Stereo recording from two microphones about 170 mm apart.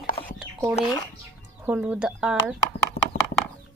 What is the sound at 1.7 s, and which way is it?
Speech, 5° right (ahead or behind).